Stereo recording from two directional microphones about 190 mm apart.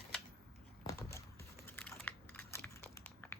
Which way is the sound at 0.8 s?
15° left (ahead or behind).